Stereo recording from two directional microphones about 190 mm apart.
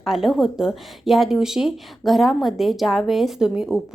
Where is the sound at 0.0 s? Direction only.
Centre (ahead or behind).